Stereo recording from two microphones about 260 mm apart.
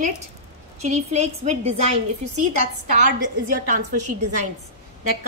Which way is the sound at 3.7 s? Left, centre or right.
Right.